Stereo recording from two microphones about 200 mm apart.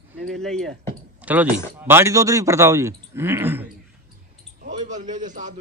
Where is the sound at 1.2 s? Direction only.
10° right (ahead or behind).